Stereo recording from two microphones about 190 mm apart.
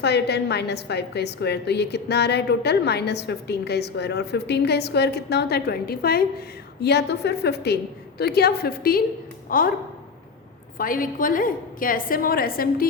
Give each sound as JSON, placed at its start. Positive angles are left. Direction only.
{"t": 0.0, "sound": "a woman's voice", "side_deg": 60}
{"t": 10.8, "sound": "a woman's voice", "side_deg": 45}